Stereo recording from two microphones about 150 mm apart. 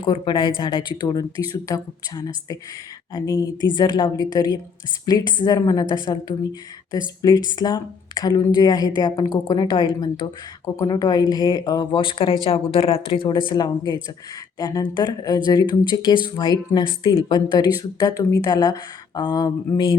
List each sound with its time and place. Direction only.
0.0 s speech: 30° left (ahead or behind)